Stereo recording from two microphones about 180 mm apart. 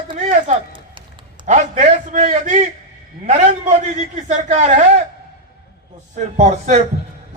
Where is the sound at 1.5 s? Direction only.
40° right (ahead or behind).